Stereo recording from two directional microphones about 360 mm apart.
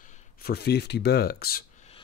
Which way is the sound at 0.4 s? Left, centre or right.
Left.